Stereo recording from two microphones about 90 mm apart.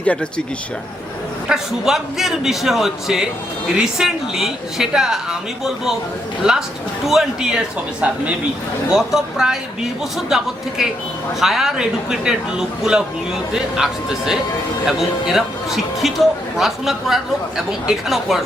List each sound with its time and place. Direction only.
0.0 s speech: 15° left (ahead or behind)
1.5 s speech: 5° right (ahead or behind)
7.0 s a man's voice: 5° right (ahead or behind)
8.9 s a man's voice: 5° right (ahead or behind)